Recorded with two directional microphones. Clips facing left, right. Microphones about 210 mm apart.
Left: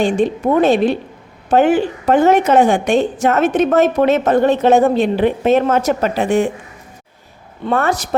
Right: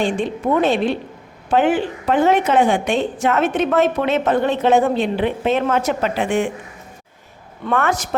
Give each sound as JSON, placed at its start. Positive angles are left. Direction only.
{"t": 0.0, "sound": "a woman's voice", "side_deg": 40}
{"t": 7.6, "sound": "a woman's voice", "side_deg": 35}